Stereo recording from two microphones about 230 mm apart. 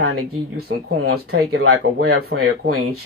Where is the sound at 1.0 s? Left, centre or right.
Right.